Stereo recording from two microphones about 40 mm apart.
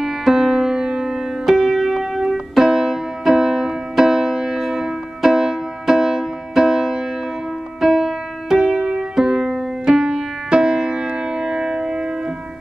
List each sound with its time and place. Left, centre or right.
0.0 s music: centre